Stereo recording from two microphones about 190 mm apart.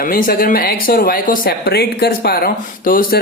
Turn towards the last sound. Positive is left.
turn(degrees=50)  # may be behind; listen again after turning